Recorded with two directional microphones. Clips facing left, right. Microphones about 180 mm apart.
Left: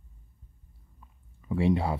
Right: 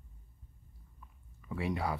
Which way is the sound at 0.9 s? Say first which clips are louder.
Left 1 dB; 25° left (ahead or behind).